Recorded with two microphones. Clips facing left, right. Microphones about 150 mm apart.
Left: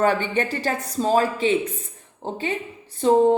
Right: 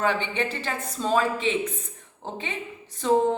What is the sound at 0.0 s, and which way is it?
A woman's voice, 45° left (ahead or behind).